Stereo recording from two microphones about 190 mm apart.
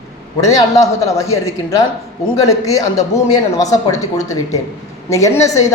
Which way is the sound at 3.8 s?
20° left (ahead or behind).